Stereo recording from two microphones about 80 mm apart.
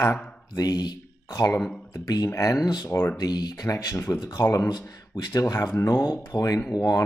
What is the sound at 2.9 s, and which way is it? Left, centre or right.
Speech, left.